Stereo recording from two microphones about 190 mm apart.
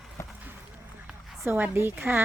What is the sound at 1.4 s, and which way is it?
Speech, 10° right (ahead or behind).